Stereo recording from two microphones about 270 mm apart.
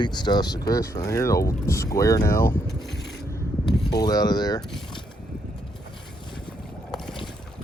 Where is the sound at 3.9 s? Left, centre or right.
Centre.